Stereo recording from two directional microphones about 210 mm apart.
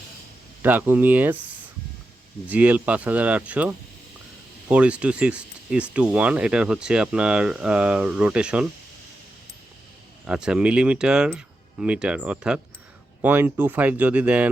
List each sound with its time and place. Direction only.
0.6 s speech: 10° right (ahead or behind)
2.5 s speech: 5° right (ahead or behind)
10.2 s speech: 5° right (ahead or behind)